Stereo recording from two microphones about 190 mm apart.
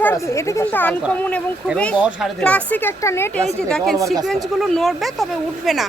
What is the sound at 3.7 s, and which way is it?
Speech, 5° left (ahead or behind).